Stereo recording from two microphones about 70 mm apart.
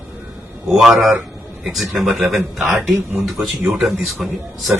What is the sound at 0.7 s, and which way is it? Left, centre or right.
A man's voice, centre.